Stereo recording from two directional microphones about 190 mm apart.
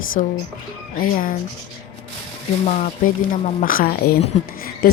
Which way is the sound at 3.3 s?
45° left (ahead or behind).